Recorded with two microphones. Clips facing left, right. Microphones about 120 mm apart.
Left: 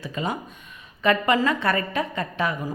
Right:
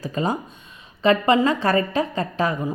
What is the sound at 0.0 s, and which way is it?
A woman's voice, 35° right (ahead or behind).